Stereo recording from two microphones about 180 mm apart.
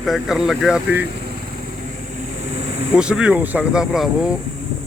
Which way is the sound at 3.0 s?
5° right (ahead or behind).